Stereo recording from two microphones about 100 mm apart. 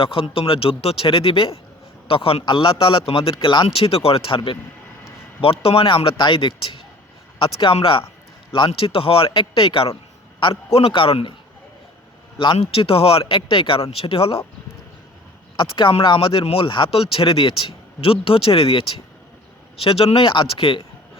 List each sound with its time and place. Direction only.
0.0 s speech: 60° left (ahead or behind)
3.3 s speech: 50° left (ahead or behind)
3.7 s speech: 75° left (ahead or behind)
5.4 s speech: 65° left (ahead or behind)
10.4 s speech: 70° left (ahead or behind)
12.5 s speech: 70° left (ahead or behind)
15.5 s speech: 60° left (ahead or behind)